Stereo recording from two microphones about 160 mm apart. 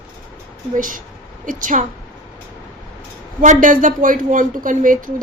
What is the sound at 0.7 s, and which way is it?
A woman's voice, 60° right (ahead or behind).